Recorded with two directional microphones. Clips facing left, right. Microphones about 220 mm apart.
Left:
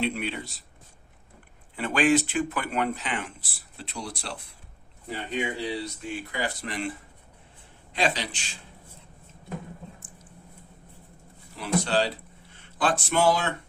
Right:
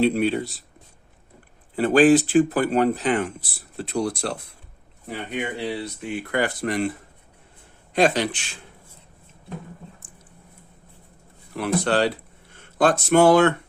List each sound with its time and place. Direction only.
0.0 s speech: 40° right (ahead or behind)
1.7 s speech: 35° right (ahead or behind)
5.0 s speech: 55° right (ahead or behind)
7.9 s speech: 50° right (ahead or behind)
11.5 s speech: 60° right (ahead or behind)
12.5 s speech: 45° right (ahead or behind)